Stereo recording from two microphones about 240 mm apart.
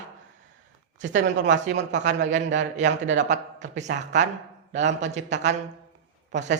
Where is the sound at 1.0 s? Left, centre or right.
Right.